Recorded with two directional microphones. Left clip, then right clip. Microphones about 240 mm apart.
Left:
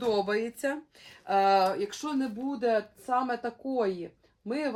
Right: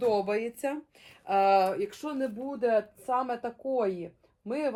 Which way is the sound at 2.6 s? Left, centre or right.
Left.